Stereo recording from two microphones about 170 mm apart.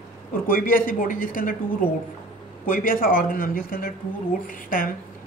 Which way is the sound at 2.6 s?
55° left (ahead or behind).